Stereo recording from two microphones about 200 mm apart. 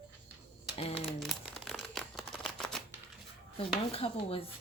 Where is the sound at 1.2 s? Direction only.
Centre (ahead or behind).